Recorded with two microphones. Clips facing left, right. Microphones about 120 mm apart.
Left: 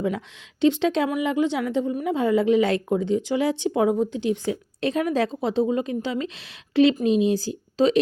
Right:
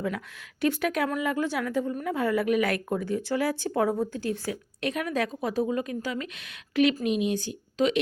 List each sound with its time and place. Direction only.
0.6 s a woman's voice: 25° left (ahead or behind)